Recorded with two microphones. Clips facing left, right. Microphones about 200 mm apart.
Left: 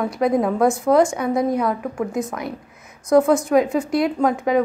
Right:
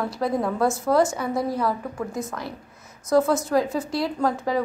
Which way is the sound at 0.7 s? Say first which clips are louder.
Left 4 dB; centre (ahead or behind).